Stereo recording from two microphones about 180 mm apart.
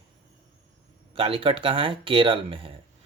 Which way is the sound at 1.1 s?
30° right (ahead or behind).